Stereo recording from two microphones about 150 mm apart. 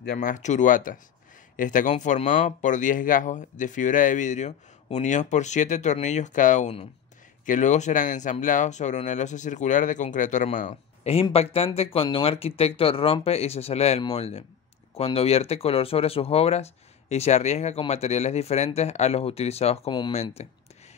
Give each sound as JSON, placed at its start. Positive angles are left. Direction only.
{"t": 0.0, "sound": "speech", "side_deg": 65}
{"t": 11.3, "sound": "speech", "side_deg": 40}